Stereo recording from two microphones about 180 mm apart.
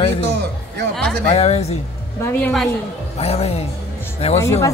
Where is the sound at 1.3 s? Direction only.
35° left (ahead or behind).